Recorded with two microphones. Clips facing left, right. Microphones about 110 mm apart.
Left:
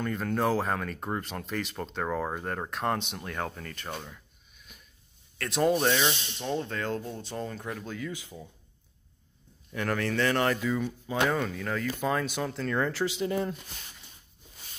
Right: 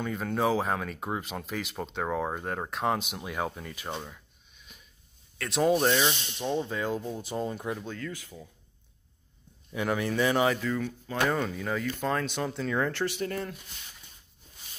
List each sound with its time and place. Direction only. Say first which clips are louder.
0.0 s speech: even; 5° right (ahead or behind)
4.0 s a sound: right 2 dB; centre (ahead or behind)
5.4 s speech: right 1 dB; centre (ahead or behind)
7.8 s speech: left 1 dB; 5° left (ahead or behind)
8.1 s speech: left 1 dB; 20° left (ahead or behind)
9.7 s speech: right 1 dB; 10° right (ahead or behind)
10.6 s speech: left 1 dB; 15° left (ahead or behind)
11.2 s speech: right 2 dB; centre (ahead or behind)
13.0 s speech: left 2 dB; 15° left (ahead or behind)